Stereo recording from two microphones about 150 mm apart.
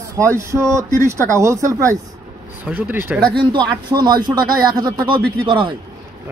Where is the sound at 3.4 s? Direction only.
30° right (ahead or behind).